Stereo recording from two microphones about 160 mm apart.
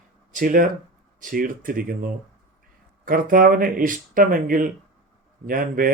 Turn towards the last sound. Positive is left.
turn(degrees=-60)  # may be behind; listen again after turning